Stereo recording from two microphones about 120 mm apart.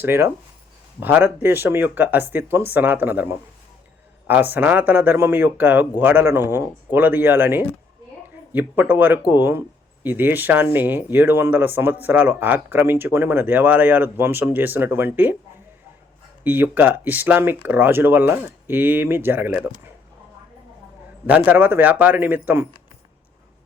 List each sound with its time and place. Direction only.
0.0 s speech: 20° right (ahead or behind)
16.4 s speech: 15° right (ahead or behind)
21.2 s speech: 15° right (ahead or behind)